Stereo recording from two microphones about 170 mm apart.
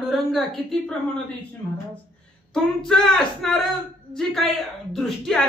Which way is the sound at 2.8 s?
Centre (ahead or behind).